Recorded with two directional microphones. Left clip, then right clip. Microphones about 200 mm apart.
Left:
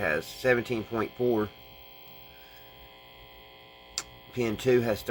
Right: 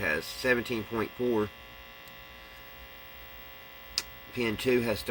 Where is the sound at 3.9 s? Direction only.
15° left (ahead or behind).